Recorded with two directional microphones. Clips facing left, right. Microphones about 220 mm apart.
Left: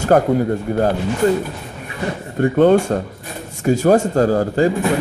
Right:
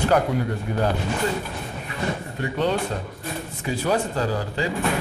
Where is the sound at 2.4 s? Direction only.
50° left (ahead or behind).